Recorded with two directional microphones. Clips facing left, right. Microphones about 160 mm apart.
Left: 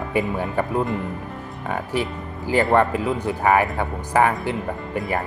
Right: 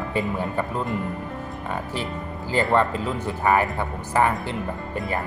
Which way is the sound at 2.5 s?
15° left (ahead or behind).